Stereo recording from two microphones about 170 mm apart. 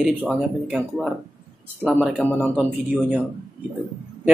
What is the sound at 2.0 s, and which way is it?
Speech, 10° left (ahead or behind).